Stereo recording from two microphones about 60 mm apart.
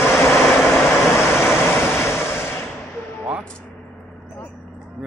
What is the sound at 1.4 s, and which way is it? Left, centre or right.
Vehicle, left.